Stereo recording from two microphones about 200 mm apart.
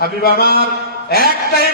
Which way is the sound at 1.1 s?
50° left (ahead or behind).